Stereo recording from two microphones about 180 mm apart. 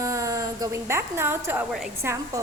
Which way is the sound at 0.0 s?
20° right (ahead or behind).